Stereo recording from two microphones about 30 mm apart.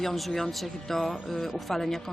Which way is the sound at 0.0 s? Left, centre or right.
Centre.